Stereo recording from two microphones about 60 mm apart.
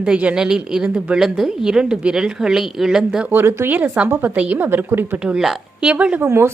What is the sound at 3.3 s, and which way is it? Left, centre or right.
A woman's voice, right.